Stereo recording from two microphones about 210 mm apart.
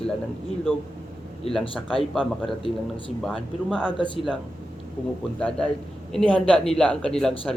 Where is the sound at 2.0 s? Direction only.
Centre (ahead or behind).